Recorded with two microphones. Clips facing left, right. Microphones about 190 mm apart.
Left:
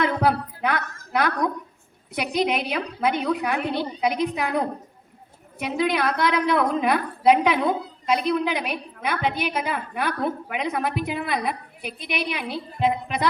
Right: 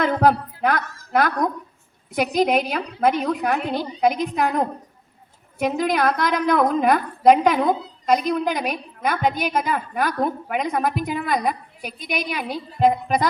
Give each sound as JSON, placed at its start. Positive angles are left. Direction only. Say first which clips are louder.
{"t": 0.0, "sound": "a sound", "louder": "right 3 dB", "side_deg": -45}
{"t": 2.1, "sound": "a woman's voice", "louder": "right 4 dB", "side_deg": -45}
{"t": 5.5, "sound": "a woman's voice", "louder": "right 3 dB", "side_deg": -45}